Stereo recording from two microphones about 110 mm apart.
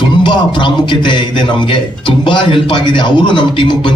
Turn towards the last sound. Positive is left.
turn(degrees=50)  # may be behind; listen again after turning